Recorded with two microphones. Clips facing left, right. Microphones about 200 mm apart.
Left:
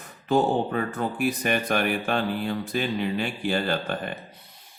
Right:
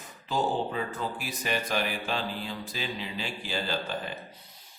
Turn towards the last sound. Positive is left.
turn(degrees=55)  # may be behind; listen again after turning